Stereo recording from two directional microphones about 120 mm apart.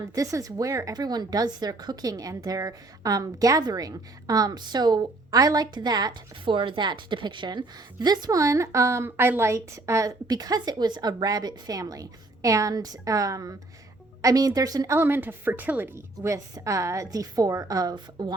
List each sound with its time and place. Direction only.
0.1 s speech: 30° right (ahead or behind)
14.9 s a woman's voice: 15° right (ahead or behind); by 18.3 s 35° right (ahead or behind)